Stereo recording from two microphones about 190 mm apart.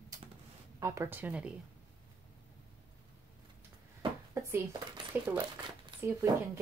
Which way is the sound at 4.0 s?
15° right (ahead or behind).